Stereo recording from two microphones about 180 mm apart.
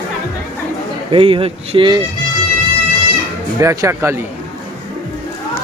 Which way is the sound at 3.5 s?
15° right (ahead or behind).